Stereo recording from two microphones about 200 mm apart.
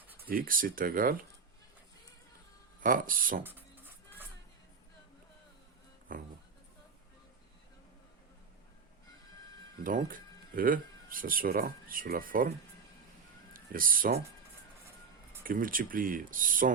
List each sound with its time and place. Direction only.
0.3 s speech: 45° right (ahead or behind)
2.8 s speech: 45° right (ahead or behind)
3.4 s a sound: 10° right (ahead or behind)
6.1 s speech: 45° right (ahead or behind)
9.8 s speech: 45° right (ahead or behind)
15.4 s speech: 45° right (ahead or behind)